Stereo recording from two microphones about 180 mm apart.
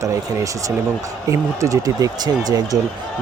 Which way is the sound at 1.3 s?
15° right (ahead or behind).